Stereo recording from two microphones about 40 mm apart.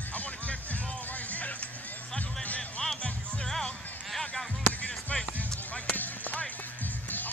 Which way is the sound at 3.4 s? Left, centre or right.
Centre.